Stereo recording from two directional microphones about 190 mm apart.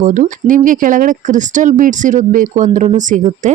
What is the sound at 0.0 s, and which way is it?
Speech, 45° right (ahead or behind).